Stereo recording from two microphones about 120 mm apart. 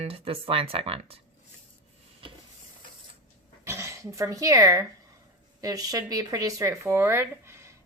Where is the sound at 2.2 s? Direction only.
45° right (ahead or behind).